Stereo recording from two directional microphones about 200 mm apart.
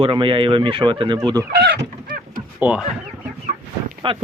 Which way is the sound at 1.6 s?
55° right (ahead or behind).